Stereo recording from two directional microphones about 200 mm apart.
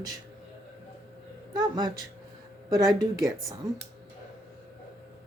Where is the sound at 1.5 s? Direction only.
20° right (ahead or behind).